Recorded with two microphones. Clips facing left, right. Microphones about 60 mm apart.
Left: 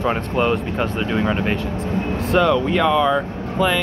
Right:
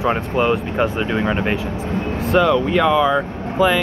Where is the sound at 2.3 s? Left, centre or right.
Centre.